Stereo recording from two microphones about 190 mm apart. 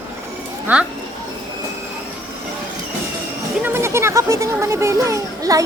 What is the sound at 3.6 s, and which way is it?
Speech, 15° right (ahead or behind).